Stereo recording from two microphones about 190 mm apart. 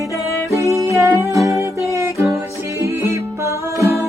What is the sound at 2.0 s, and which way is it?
Music, 15° right (ahead or behind).